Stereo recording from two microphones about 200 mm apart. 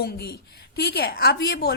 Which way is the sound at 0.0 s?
55° left (ahead or behind).